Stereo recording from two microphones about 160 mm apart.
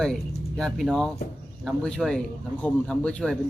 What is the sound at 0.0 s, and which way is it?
A man's voice, 5° left (ahead or behind).